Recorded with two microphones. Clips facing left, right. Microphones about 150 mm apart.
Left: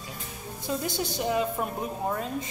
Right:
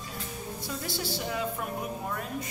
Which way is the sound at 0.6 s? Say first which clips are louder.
Left 6 dB; 20° left (ahead or behind).